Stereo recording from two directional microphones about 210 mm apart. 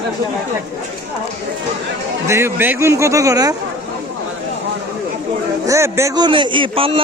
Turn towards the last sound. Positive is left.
turn(degrees=-25)  # may be behind; listen again after turning